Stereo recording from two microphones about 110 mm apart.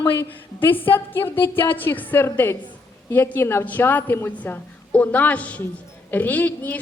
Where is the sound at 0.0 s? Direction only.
15° left (ahead or behind).